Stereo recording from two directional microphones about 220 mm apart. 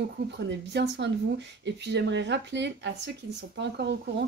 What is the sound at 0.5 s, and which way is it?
Speech, 50° right (ahead or behind).